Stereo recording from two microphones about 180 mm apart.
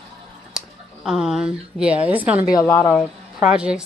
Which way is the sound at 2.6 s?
10° left (ahead or behind).